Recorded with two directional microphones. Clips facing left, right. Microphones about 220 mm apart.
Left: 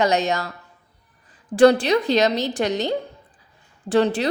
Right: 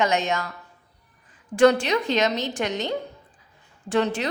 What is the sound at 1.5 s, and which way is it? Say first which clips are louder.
A woman's voice: left 3 dB; 35° left (ahead or behind).